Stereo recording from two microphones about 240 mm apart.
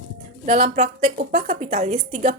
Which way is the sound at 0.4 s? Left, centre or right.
Right.